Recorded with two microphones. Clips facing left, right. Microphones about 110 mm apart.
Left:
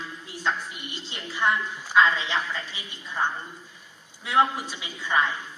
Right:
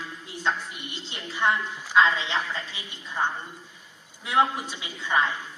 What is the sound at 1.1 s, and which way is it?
A woman's voice, 20° right (ahead or behind).